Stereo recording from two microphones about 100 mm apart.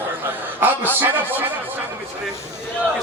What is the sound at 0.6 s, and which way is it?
Chuckle, 20° right (ahead or behind).